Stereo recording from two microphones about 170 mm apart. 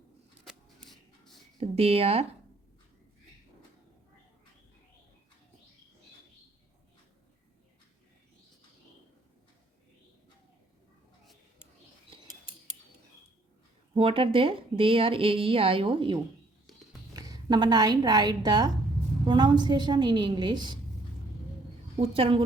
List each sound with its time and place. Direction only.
0.4 s a sound: centre (ahead or behind)
1.5 s a woman's voice: 35° right (ahead or behind)
13.9 s a woman's voice: 30° right (ahead or behind)
17.2 s a woman's voice: 20° right (ahead or behind)
22.0 s a woman's voice: 35° right (ahead or behind)